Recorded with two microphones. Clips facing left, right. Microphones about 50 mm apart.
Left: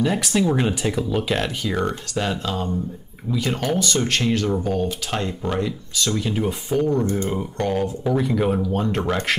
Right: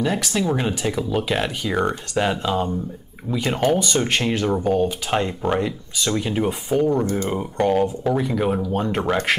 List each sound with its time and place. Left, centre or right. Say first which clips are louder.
0.0 s speech: left 2 dB; centre
8.1 s speech: even; centre